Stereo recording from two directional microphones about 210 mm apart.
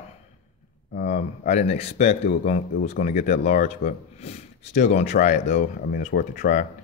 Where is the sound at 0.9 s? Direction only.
35° left (ahead or behind).